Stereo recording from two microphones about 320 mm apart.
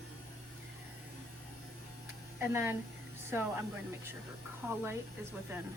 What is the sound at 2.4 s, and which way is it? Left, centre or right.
Speech, centre.